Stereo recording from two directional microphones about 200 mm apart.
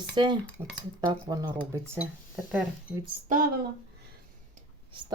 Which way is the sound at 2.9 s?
5° right (ahead or behind).